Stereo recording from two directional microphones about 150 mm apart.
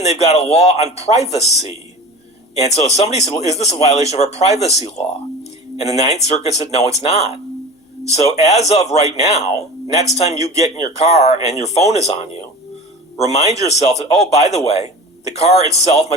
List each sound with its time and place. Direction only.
0.0 s speech: 45° left (ahead or behind)